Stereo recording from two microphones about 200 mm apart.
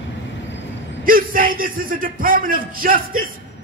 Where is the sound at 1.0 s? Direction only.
45° right (ahead or behind).